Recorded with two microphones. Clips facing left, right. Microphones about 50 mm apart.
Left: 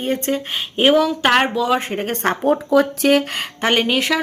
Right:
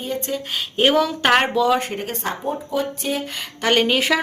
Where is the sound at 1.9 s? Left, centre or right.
Left.